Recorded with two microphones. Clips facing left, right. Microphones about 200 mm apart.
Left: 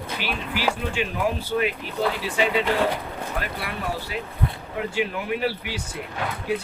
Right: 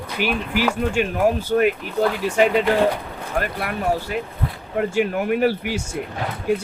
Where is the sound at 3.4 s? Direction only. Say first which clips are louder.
Right 9 dB; 45° right (ahead or behind).